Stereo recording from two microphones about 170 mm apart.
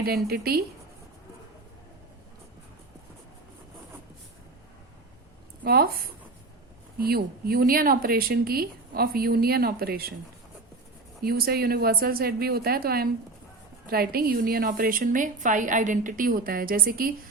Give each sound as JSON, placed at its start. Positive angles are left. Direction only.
{"t": 0.0, "sound": "a woman's voice", "side_deg": -65}
{"t": 5.6, "sound": "a woman's voice", "side_deg": -65}
{"t": 7.0, "sound": "a woman's voice", "side_deg": -60}
{"t": 11.2, "sound": "a woman's voice", "side_deg": -65}